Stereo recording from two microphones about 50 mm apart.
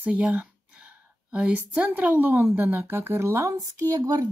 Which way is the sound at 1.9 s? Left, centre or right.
Right.